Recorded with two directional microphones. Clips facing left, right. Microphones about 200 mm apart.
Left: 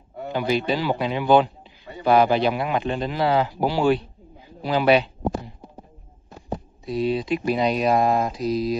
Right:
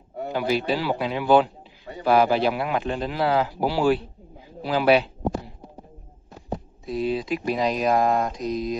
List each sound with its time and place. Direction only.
0.3 s speech: 5° right (ahead or behind)
6.9 s speech: centre (ahead or behind)